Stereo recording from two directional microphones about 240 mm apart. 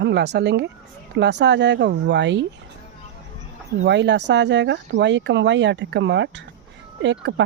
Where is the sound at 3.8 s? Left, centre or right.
Right.